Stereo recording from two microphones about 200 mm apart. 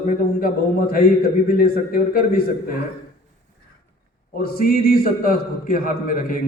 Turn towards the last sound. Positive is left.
turn(degrees=40)  # may be behind; listen again after turning